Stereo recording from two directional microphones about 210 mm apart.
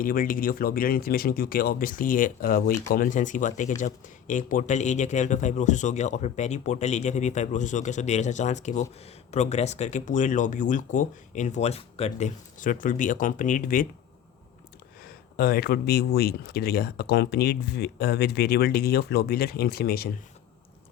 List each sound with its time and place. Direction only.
0.0 s speech: 40° left (ahead or behind)
15.0 s speech: 45° left (ahead or behind)